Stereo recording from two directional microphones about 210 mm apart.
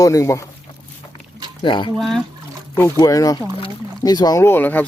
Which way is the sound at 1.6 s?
20° left (ahead or behind).